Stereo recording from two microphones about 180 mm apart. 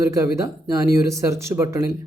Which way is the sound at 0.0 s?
15° right (ahead or behind).